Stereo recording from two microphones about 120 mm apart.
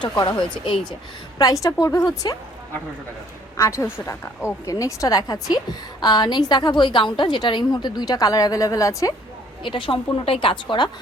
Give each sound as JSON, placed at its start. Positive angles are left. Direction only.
{"t": 0.0, "sound": "a woman's voice", "side_deg": 40}
{"t": 1.4, "sound": "a woman's voice", "side_deg": 30}
{"t": 3.6, "sound": "a woman's voice", "side_deg": 25}
{"t": 9.6, "sound": "a woman's voice", "side_deg": 45}